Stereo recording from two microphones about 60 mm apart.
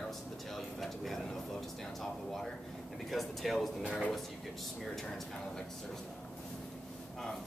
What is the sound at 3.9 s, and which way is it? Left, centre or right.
Speech, centre.